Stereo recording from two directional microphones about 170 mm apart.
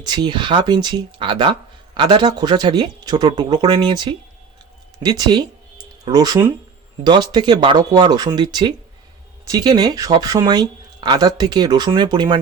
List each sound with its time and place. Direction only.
0.0 s speech: 25° right (ahead or behind)